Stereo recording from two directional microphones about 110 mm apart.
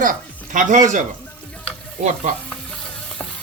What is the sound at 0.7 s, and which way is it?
Speech, 90° right.